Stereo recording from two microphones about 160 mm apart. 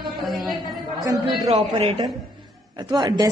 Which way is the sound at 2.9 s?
25° right (ahead or behind).